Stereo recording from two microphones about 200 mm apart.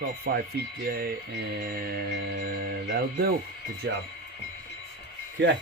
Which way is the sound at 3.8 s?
60° right (ahead or behind).